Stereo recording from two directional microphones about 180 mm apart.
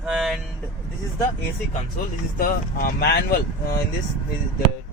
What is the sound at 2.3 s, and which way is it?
Speech, 55° left (ahead or behind).